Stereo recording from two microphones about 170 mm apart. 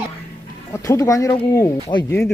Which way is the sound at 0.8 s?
20° left (ahead or behind).